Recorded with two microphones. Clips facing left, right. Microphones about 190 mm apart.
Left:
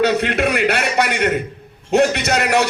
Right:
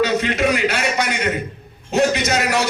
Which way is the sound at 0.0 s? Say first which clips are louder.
Left 1 dB; 60° left (ahead or behind).